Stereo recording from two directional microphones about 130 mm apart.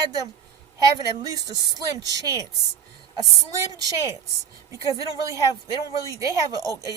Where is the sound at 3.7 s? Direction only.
30° right (ahead or behind).